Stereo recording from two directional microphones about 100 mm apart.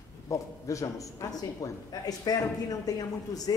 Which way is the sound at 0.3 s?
35° left (ahead or behind).